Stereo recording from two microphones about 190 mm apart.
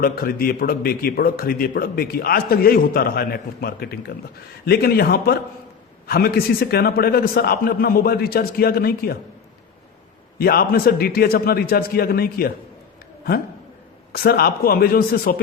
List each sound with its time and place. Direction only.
0.0 s a man's voice: 50° left (ahead or behind)
10.3 s speech: 50° left (ahead or behind)
14.1 s speech: 55° left (ahead or behind)